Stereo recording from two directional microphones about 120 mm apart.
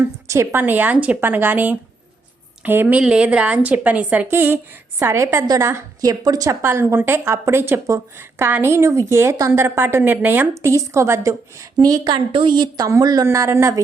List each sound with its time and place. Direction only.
0.0 s a woman's voice: 20° right (ahead or behind)